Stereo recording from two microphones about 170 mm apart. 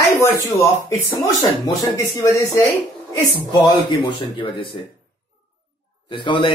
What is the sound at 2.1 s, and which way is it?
Speech, 15° left (ahead or behind).